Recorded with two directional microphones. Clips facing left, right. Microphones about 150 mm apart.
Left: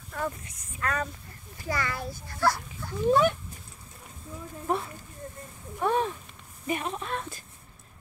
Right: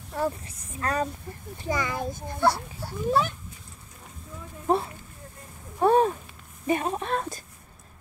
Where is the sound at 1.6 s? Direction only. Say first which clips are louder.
Right 3 dB; 20° right (ahead or behind).